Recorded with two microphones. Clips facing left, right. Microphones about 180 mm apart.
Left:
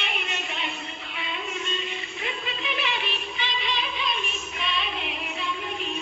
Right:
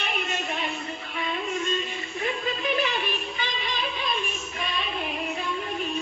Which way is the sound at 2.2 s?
45° right (ahead or behind).